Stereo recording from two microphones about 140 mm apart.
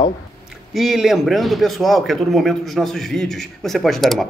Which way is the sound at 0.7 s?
Centre (ahead or behind).